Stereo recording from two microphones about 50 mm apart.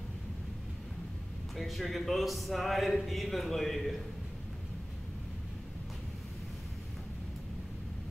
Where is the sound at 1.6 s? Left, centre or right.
Centre.